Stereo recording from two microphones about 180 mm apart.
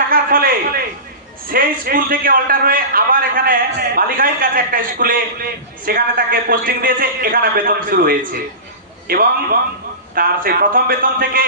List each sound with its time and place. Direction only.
0.1 s a man's voice: 55° right (ahead or behind)